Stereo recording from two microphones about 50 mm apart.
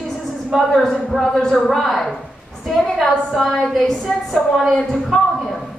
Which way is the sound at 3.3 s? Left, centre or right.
Centre.